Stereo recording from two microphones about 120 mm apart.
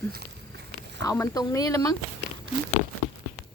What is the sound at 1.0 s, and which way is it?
Speech, 30° left (ahead or behind).